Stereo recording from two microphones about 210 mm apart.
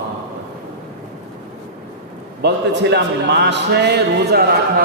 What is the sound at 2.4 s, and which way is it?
Speech, 55° right (ahead or behind).